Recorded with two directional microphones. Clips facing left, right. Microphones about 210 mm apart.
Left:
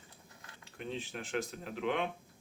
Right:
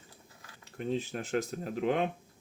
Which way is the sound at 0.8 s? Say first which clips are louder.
Right 7 dB; 40° right (ahead or behind).